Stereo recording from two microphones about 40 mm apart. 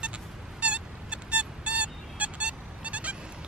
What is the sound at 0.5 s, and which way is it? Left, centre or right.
Vehicle, right.